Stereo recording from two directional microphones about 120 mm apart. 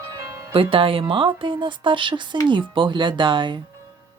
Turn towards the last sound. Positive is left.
turn(degrees=-40)  # may be behind; listen again after turning